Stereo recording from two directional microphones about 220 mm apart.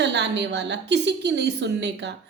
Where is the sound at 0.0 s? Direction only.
50° right (ahead or behind).